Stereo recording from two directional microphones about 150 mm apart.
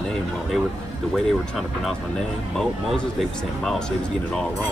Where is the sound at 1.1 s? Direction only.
Centre (ahead or behind).